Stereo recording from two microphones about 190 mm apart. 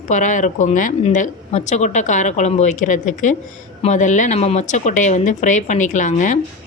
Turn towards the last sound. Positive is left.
turn(degrees=40)  # may be behind; listen again after turning